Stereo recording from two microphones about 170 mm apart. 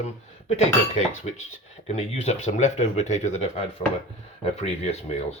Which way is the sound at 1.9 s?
40° left (ahead or behind).